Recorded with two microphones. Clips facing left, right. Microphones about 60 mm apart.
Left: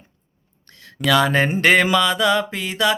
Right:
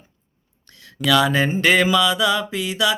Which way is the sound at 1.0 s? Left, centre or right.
Left.